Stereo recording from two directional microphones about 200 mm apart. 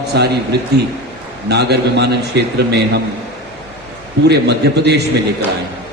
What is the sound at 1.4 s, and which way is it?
Speech, 55° right (ahead or behind).